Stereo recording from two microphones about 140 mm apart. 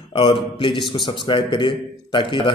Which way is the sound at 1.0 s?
35° left (ahead or behind).